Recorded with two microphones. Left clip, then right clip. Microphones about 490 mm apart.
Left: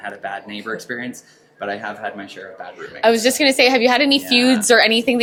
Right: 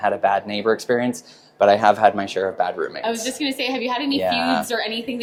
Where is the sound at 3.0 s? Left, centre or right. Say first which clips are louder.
Left 10 dB; left.